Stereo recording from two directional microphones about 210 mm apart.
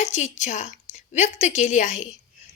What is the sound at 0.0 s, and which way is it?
A woman's voice, 35° left (ahead or behind).